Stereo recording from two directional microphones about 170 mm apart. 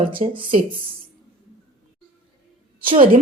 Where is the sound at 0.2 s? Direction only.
45° right (ahead or behind).